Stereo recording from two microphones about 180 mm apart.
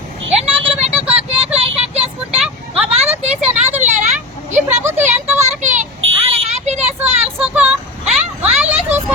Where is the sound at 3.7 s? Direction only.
40° right (ahead or behind).